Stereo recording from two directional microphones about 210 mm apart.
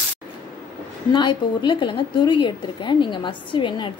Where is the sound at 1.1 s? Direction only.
20° left (ahead or behind).